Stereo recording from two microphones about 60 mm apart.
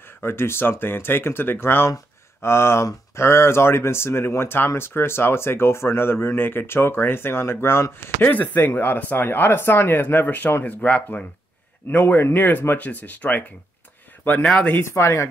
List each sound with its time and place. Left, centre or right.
0.2 s speech: left
8.3 s speech: left
14.8 s speech: left